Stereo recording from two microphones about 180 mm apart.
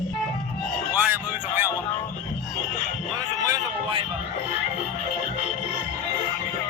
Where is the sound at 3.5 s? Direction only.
25° right (ahead or behind).